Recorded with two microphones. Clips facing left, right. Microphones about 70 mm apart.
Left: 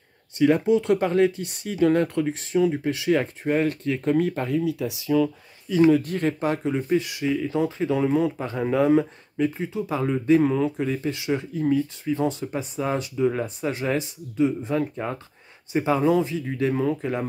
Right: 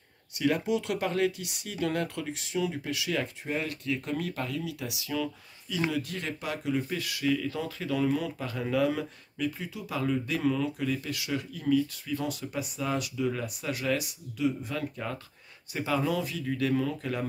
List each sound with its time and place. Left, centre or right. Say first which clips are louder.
0.4 s speech: left 8 dB; left